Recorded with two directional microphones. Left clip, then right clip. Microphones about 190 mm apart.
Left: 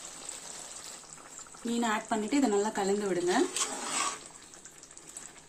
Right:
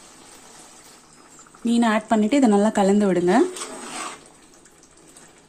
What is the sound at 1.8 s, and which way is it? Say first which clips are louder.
Speech: right 10 dB; 45° right (ahead or behind).